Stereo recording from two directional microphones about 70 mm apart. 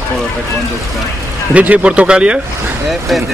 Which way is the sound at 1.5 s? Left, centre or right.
Right.